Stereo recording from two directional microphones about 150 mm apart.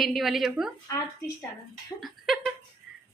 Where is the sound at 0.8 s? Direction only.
20° left (ahead or behind).